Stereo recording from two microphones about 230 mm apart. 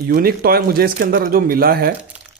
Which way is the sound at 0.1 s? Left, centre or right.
Right.